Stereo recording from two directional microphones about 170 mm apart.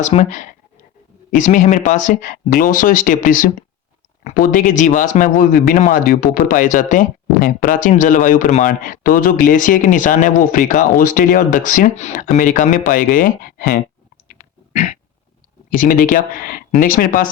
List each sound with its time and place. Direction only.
0.0 s a man's voice: 45° left (ahead or behind)
14.3 s a sound: 55° left (ahead or behind)
15.7 s speech: 55° left (ahead or behind)